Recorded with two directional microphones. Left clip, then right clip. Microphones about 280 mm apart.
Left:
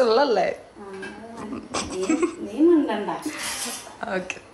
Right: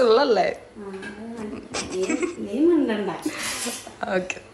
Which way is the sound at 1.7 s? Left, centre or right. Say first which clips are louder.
Left 1 dB; centre.